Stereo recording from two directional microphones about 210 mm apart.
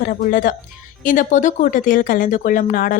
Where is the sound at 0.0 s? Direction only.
40° left (ahead or behind).